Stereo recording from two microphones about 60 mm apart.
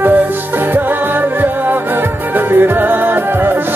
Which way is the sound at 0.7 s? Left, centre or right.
Right.